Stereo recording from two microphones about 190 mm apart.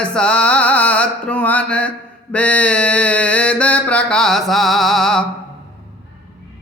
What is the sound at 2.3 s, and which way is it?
Mantra, 5° left (ahead or behind).